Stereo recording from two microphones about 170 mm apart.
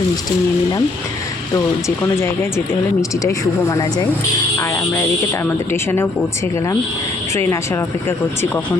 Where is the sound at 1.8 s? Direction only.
15° left (ahead or behind).